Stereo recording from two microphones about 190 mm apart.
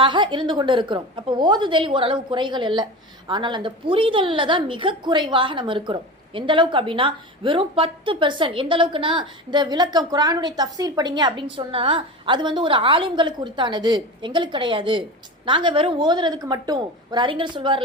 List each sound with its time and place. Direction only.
0.0 s a woman's voice: 25° right (ahead or behind)